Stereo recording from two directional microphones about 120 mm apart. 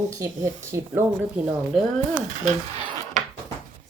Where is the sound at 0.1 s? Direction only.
25° right (ahead or behind).